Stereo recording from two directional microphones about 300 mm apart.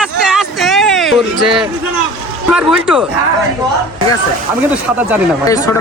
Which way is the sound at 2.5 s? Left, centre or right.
Centre.